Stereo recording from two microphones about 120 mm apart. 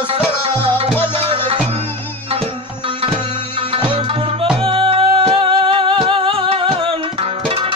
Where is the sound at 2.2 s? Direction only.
55° right (ahead or behind).